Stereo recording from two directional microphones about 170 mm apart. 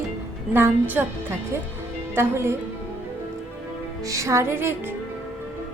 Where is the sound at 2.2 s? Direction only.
15° right (ahead or behind).